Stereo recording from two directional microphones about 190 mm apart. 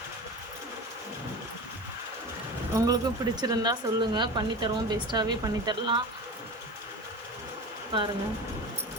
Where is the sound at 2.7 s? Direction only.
20° right (ahead or behind).